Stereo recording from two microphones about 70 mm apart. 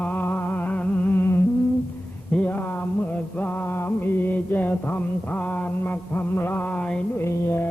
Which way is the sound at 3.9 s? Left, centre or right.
Left.